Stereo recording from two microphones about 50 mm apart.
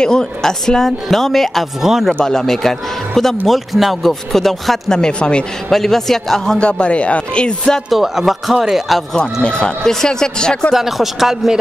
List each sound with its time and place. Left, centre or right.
0.0 s a woman's voice: centre
1.8 s speech: centre
2.1 s a woman's voice: centre
4.9 s a woman's voice: centre
5.7 s a woman's voice: centre
6.6 s speech: left
7.9 s speech: centre
9.1 s a woman's voice: centre
10.7 s speech: centre